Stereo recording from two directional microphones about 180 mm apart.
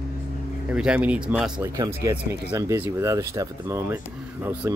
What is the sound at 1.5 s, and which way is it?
Speech, 20° right (ahead or behind).